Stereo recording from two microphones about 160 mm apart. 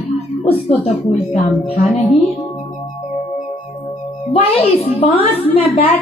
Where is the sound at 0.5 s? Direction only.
40° left (ahead or behind).